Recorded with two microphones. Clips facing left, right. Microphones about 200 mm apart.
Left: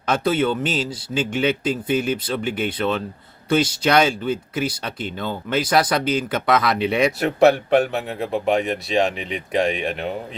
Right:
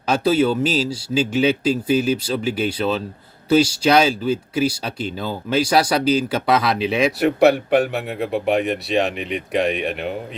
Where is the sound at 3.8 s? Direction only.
10° right (ahead or behind).